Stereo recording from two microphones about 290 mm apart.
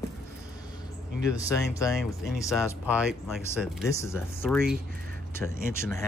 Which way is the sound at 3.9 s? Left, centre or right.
Centre.